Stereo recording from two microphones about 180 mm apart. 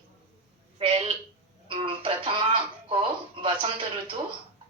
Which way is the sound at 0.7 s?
30° right (ahead or behind).